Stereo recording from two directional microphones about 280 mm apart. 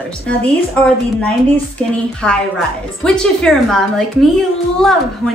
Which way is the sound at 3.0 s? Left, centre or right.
Centre.